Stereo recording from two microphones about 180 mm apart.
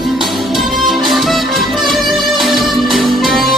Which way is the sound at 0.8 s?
Centre (ahead or behind).